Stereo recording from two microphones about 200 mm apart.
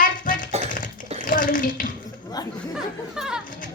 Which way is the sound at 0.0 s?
40° left (ahead or behind).